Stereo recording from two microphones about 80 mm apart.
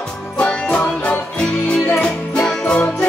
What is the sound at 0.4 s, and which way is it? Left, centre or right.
Music, centre.